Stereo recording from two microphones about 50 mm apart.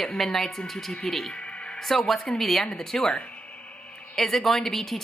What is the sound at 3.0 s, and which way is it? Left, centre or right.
Speech, left.